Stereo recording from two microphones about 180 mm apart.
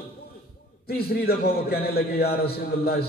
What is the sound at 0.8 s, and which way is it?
A man's voice, 60° left (ahead or behind).